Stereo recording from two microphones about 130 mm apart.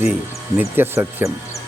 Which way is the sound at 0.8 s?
20° right (ahead or behind).